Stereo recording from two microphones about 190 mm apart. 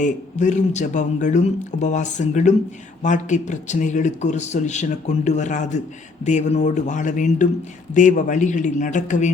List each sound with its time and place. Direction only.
0.0 s speech: 40° left (ahead or behind)